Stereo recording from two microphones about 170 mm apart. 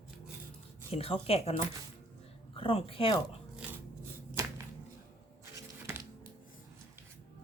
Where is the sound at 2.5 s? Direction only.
35° left (ahead or behind).